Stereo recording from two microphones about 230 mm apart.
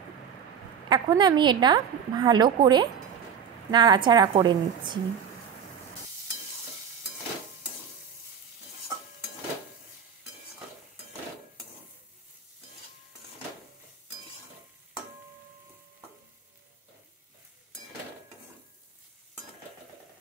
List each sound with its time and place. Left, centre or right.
0.8 s a woman's voice: centre